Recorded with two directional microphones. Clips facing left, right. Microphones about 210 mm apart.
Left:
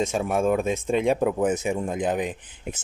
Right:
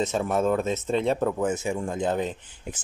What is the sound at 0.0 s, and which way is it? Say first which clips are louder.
Speech: left 1 dB; 10° left (ahead or behind).